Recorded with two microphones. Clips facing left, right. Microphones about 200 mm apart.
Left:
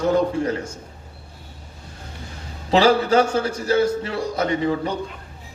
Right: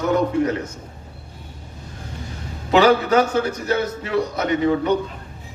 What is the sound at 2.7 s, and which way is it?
A man's voice, 30° left (ahead or behind).